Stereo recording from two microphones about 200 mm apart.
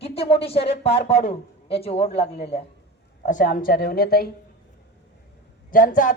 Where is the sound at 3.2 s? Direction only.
40° left (ahead or behind).